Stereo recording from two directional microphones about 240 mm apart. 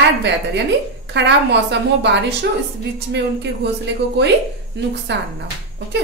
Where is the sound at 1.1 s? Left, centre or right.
Right.